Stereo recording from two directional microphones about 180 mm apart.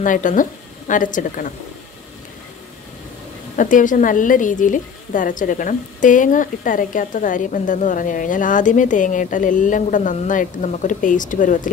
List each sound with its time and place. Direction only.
0.0 s a woman's voice: 45° left (ahead or behind)
3.5 s a woman's voice: 45° left (ahead or behind)